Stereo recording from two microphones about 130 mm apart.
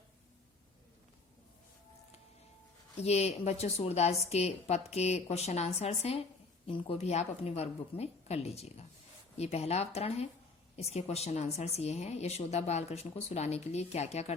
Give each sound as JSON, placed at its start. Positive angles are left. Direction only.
{"t": 3.0, "sound": "a woman's voice", "side_deg": 55}